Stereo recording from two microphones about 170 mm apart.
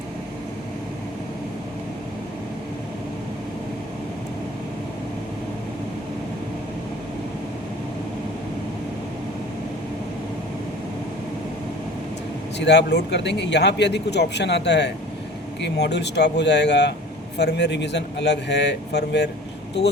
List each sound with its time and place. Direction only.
12.5 s speech: 90° left